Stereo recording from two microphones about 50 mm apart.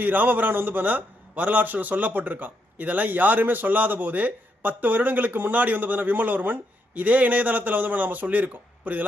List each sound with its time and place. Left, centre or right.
0.0 s a man's voice: right